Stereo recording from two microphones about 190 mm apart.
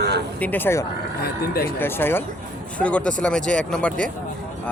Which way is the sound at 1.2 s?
55° left (ahead or behind).